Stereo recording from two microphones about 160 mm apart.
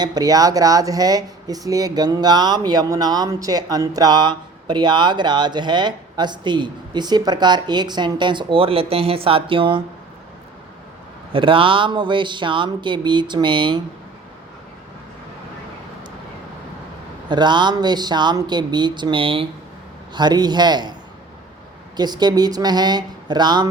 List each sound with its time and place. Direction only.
0.0 s speech: 25° right (ahead or behind)
11.3 s speech: 35° right (ahead or behind)
17.2 s speech: 30° right (ahead or behind)
21.9 s speech: 25° right (ahead or behind)